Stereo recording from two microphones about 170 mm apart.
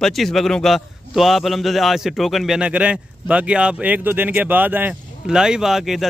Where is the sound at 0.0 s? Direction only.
Centre (ahead or behind).